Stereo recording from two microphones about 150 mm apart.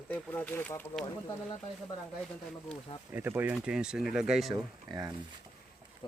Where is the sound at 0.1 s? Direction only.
10° left (ahead or behind).